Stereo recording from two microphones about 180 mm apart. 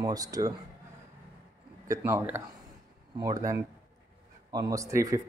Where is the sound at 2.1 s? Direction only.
10° right (ahead or behind).